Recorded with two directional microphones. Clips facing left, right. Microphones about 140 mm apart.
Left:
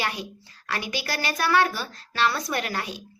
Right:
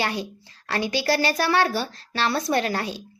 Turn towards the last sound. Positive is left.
turn(degrees=-30)  # may be behind; listen again after turning